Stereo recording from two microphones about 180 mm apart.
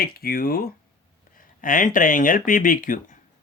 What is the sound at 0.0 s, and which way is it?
Speech, 55° left (ahead or behind).